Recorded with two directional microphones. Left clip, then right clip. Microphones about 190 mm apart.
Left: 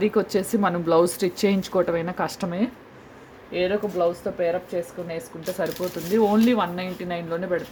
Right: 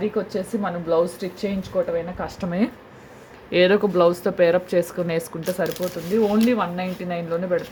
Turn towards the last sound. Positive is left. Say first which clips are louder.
# right 3 dB
turn(degrees=0)  # may be behind; listen again after turning